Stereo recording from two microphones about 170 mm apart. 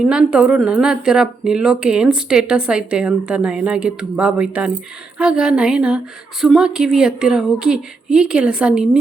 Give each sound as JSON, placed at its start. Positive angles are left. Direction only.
{"t": 0.0, "sound": "a woman's voice", "side_deg": -5}